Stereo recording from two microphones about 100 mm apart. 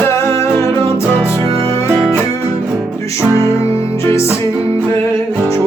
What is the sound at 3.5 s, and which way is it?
Music, 85° right.